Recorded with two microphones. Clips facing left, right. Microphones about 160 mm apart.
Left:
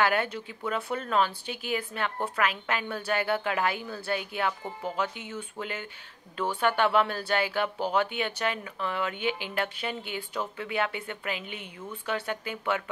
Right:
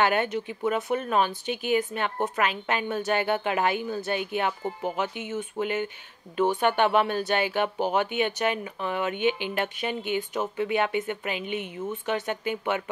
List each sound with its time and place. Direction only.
0.0 s speech: 20° right (ahead or behind)